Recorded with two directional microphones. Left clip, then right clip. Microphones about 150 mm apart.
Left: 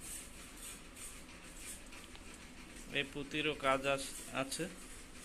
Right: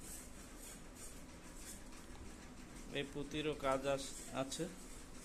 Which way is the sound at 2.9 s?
Centre (ahead or behind).